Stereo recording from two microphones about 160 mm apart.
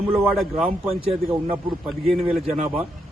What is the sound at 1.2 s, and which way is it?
Speech, 20° right (ahead or behind).